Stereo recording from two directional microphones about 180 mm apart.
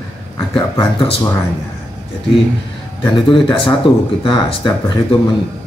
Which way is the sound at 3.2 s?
30° left (ahead or behind).